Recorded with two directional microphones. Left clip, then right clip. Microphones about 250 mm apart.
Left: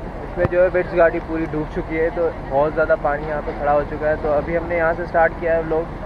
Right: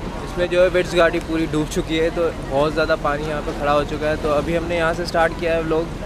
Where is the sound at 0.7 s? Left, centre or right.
Centre.